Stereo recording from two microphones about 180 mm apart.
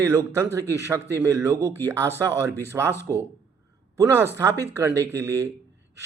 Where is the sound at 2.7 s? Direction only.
15° right (ahead or behind).